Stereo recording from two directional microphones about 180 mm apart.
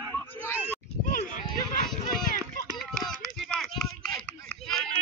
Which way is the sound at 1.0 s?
50° left (ahead or behind).